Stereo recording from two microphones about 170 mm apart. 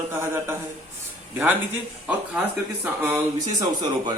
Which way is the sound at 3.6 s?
25° right (ahead or behind).